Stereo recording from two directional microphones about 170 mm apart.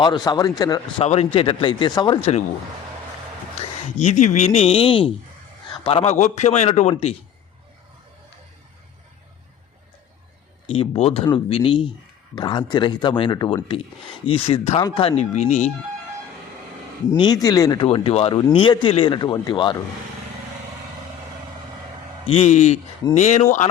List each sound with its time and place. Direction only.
0.0 s speech: 25° left (ahead or behind)
1.0 s a man's voice: 40° left (ahead or behind)
4.0 s a man's voice: 45° left (ahead or behind)
10.7 s a man's voice: 35° left (ahead or behind)
17.1 s speech: 25° left (ahead or behind)
17.8 s a man's voice: 35° left (ahead or behind)
22.3 s a man's voice: 40° left (ahead or behind)